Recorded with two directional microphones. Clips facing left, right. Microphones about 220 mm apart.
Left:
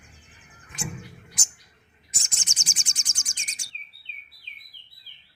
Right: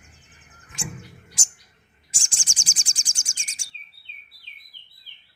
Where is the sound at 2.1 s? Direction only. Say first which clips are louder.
Even; 30° right (ahead or behind).